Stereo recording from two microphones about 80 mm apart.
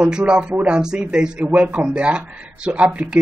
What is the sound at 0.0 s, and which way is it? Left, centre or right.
A woman's voice, centre.